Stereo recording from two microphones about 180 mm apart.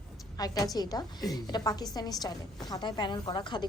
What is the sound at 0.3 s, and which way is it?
A woman's voice, 20° left (ahead or behind).